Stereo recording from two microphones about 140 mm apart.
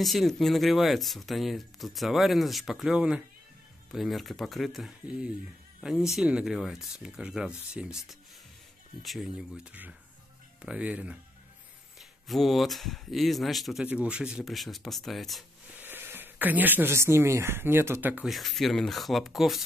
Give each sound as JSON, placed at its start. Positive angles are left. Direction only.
{"t": 0.0, "sound": "speech", "side_deg": 0}
{"t": 12.0, "sound": "speech", "side_deg": 0}
{"t": 15.7, "sound": "speech", "side_deg": -15}
{"t": 18.3, "sound": "speech", "side_deg": 0}